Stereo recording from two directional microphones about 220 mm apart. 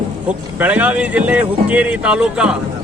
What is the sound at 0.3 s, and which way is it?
Speech, 5° right (ahead or behind).